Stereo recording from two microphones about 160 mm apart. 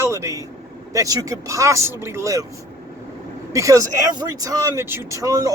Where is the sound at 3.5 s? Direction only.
20° right (ahead or behind).